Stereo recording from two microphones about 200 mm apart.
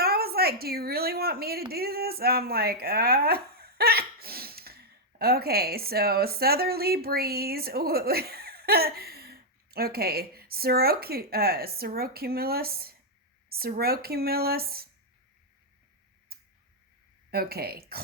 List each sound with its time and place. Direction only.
0.0 s a woman's voice: 50° right (ahead or behind)
16.3 s tick-tock: 50° right (ahead or behind)
17.3 s speech: 50° right (ahead or behind)